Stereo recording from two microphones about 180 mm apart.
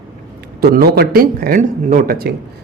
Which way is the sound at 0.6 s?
60° right (ahead or behind).